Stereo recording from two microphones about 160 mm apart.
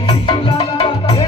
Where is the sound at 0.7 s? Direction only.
35° left (ahead or behind).